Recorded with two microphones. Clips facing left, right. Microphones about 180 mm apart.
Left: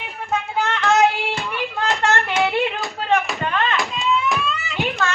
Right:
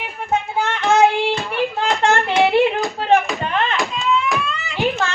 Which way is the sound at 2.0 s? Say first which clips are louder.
Right 5 dB; 25° right (ahead or behind).